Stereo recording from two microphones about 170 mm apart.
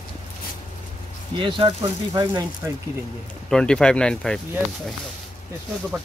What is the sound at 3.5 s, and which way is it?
Speech, 5° left (ahead or behind).